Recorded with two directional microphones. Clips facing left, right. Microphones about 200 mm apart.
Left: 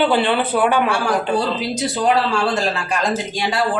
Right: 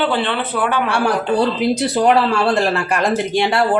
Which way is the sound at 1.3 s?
60° right (ahead or behind).